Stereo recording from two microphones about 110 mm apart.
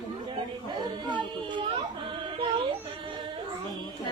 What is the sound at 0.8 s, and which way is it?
Speech, 45° right (ahead or behind).